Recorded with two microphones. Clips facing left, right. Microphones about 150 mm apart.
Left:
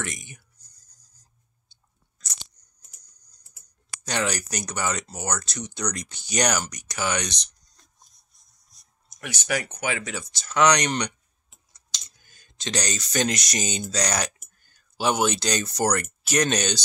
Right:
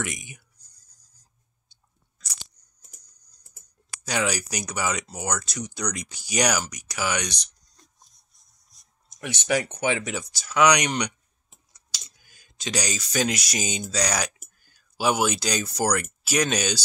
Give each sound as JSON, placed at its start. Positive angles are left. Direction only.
{"t": 0.0, "sound": "whispering", "side_deg": -10}
{"t": 4.0, "sound": "speech", "side_deg": -5}
{"t": 9.1, "sound": "speech", "side_deg": -25}